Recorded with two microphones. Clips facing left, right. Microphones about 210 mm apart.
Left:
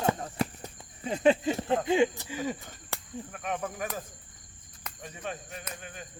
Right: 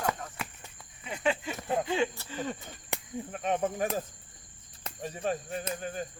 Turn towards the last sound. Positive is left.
turn(degrees=-35)  # may be behind; listen again after turning